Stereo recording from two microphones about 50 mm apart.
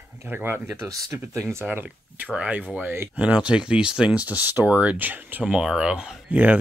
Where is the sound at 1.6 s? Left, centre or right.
Right.